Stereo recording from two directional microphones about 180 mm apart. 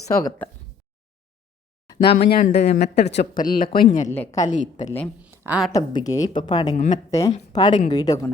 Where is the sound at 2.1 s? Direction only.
60° left (ahead or behind).